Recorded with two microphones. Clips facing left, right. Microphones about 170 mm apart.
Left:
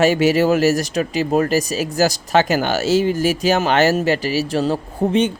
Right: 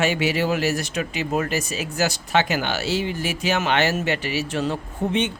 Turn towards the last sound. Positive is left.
turn(degrees=35)  # may be behind; listen again after turning